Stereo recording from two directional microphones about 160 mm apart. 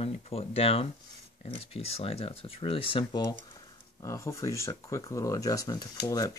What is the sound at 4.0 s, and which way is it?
Speech, 20° left (ahead or behind).